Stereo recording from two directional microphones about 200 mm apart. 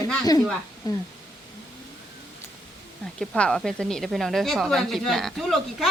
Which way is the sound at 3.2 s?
5° left (ahead or behind).